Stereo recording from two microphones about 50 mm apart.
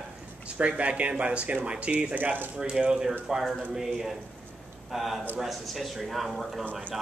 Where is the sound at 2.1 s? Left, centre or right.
Right.